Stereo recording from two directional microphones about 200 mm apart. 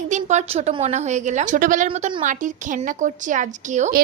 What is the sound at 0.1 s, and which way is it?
A woman's voice, 35° right (ahead or behind).